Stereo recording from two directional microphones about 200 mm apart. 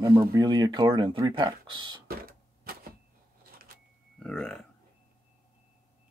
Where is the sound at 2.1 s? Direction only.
50° right (ahead or behind).